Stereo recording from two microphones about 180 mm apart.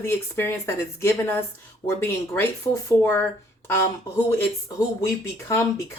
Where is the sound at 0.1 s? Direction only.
15° left (ahead or behind).